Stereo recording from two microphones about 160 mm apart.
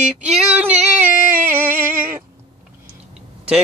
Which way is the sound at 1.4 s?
15° right (ahead or behind).